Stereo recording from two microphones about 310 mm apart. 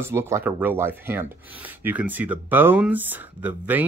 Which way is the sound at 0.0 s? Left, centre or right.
Centre.